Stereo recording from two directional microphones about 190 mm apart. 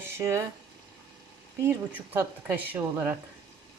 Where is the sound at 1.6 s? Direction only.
10° right (ahead or behind).